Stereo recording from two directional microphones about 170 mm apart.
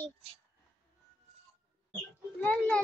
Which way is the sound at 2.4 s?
10° left (ahead or behind).